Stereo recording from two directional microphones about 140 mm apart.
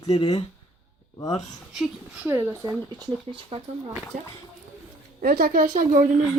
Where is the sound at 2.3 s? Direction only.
15° right (ahead or behind).